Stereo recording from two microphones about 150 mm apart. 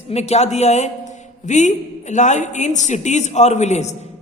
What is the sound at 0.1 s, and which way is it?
A woman's voice, 45° left (ahead or behind).